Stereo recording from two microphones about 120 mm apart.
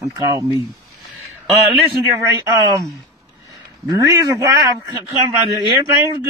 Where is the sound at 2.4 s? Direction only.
30° right (ahead or behind).